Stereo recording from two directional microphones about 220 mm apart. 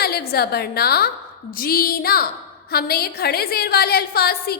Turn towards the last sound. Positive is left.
turn(degrees=45)  # may be behind; listen again after turning